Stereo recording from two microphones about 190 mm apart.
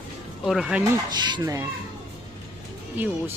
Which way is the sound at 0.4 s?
Centre (ahead or behind).